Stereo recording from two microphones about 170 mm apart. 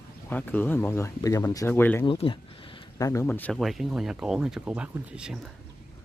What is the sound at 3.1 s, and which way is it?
Speech, 15° left (ahead or behind).